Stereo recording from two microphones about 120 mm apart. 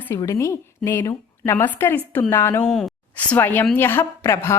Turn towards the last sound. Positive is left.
turn(degrees=20)  # may be behind; listen again after turning